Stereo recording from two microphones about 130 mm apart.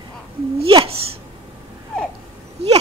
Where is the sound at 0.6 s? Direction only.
45° right (ahead or behind).